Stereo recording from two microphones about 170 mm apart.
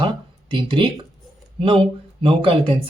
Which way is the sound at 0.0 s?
30° right (ahead or behind).